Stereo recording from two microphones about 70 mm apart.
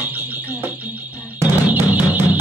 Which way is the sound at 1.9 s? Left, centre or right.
Right.